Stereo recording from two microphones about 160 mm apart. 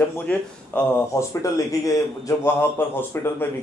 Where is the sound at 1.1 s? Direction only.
20° left (ahead or behind).